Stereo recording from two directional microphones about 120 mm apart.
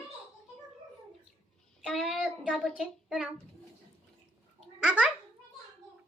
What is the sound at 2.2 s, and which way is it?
A child's voice, centre (ahead or behind).